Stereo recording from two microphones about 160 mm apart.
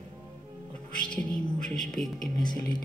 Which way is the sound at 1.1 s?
5° left (ahead or behind).